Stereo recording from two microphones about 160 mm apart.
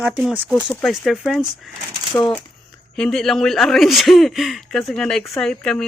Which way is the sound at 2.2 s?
15° left (ahead or behind).